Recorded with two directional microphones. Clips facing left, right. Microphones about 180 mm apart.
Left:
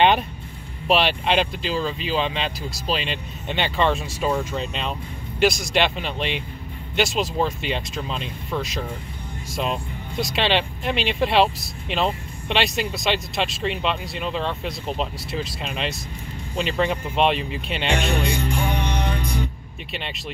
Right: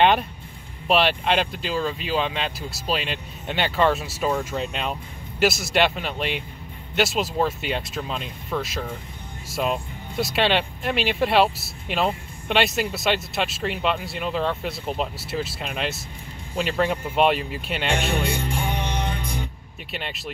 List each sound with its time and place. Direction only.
0.8 s speech: centre (ahead or behind)
18.6 s music: 30° right (ahead or behind)
19.9 s speech: 5° right (ahead or behind)